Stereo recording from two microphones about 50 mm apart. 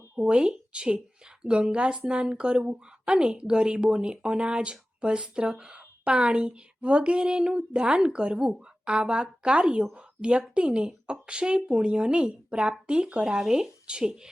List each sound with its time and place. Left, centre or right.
0.2 s speech: centre